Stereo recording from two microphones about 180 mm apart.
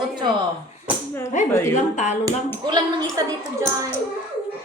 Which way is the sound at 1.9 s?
40° left (ahead or behind).